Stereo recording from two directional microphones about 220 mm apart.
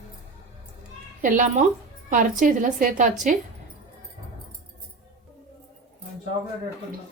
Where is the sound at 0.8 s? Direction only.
35° right (ahead or behind).